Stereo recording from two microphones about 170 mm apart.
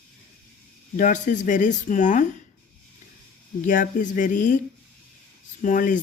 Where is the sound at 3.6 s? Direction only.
50° left (ahead or behind).